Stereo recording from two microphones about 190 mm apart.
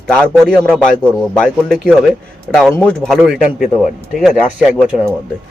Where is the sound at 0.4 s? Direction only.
5° left (ahead or behind).